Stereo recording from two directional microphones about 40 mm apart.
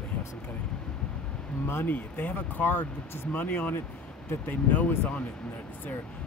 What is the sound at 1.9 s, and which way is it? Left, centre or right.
Speech, left.